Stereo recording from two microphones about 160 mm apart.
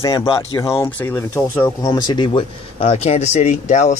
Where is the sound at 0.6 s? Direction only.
20° left (ahead or behind); by 4.0 s 50° left (ahead or behind).